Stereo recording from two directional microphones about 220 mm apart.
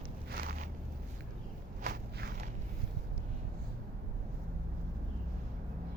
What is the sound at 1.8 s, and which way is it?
Walk, 45° right (ahead or behind).